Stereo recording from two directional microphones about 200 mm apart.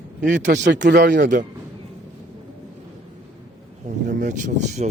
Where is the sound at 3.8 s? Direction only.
40° right (ahead or behind).